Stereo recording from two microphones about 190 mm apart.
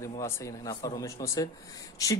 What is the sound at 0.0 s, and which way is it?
Speech, 15° left (ahead or behind).